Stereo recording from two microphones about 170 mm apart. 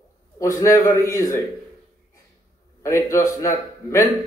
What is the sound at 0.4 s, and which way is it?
A man's voice, 20° left (ahead or behind).